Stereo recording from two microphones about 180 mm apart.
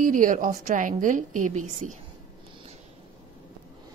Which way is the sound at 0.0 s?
50° right (ahead or behind).